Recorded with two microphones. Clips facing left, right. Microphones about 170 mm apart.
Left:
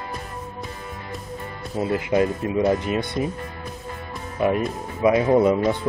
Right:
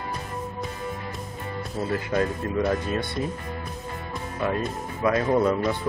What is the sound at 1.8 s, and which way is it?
Speech, 20° left (ahead or behind).